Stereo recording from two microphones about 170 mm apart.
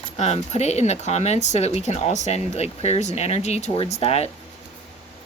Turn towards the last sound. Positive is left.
turn(degrees=40)  # may be behind; listen again after turning